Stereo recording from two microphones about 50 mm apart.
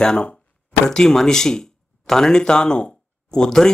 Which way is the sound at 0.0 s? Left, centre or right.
Centre.